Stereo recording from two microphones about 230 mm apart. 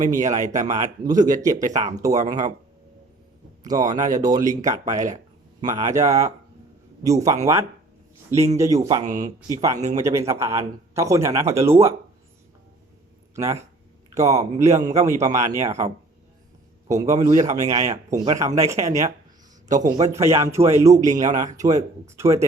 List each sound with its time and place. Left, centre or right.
0.3 s speech: centre
0.6 s speech: right
1.0 s speech: centre
3.7 s speech: centre
8.5 s speech: centre
13.3 s a man's voice: centre
15.4 s speech: right
16.9 s a man's voice: centre